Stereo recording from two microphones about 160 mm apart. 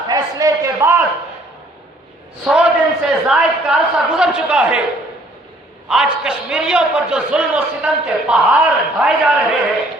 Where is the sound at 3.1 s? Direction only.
5° right (ahead or behind).